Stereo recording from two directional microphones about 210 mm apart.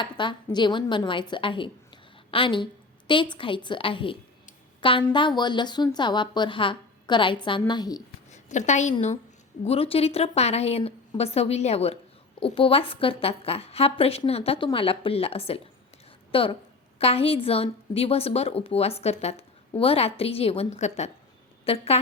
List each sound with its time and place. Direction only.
0.0 s a woman's voice: 20° left (ahead or behind)
8.3 s a woman's voice: 35° left (ahead or behind)